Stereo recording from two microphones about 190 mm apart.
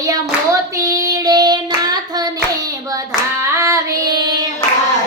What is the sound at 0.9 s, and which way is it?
Child singing, 20° right (ahead or behind).